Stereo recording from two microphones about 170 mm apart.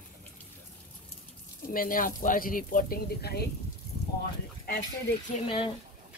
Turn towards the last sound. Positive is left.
turn(degrees=30)  # may be behind; listen again after turning